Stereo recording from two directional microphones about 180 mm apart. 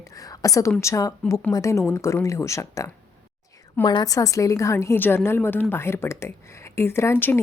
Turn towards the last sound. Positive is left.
turn(degrees=10)  # may be behind; listen again after turning